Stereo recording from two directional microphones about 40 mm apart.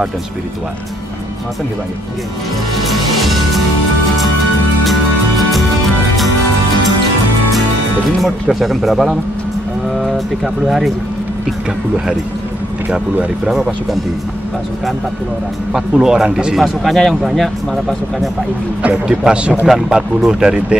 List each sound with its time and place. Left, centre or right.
2.8 s music: centre
8.2 s speech: centre
10.0 s speech: centre
15.7 s speech: centre
16.3 s a man's voice: right
16.8 s speech: centre
17.1 s speech: centre
19.0 s a man's voice: right
19.6 s speech: centre